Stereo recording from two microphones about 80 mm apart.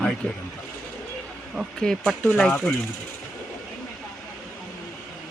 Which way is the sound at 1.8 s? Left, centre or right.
Centre.